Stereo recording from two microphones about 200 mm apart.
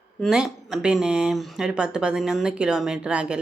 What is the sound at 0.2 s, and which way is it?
Speech, centre (ahead or behind).